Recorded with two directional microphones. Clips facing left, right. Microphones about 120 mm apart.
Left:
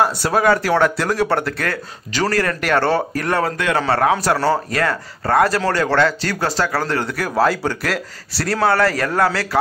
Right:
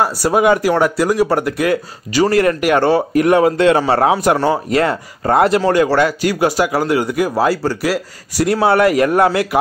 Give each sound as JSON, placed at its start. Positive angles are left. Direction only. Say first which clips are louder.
{"t": 0.0, "sound": "speech", "louder": "right 3 dB", "side_deg": -10}